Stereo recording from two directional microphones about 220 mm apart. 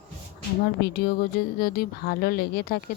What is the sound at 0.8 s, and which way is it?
Speech, 45° left (ahead or behind).